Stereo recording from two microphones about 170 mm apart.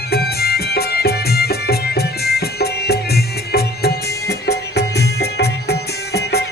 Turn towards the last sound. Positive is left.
turn(degrees=75)  # may be behind; listen again after turning